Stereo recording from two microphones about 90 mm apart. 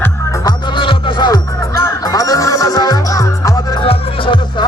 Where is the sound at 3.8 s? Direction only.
80° left.